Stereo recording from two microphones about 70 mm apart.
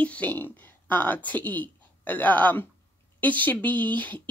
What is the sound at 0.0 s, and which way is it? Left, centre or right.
A woman's voice, left.